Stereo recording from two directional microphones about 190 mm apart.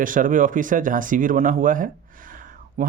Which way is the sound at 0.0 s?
45° right (ahead or behind).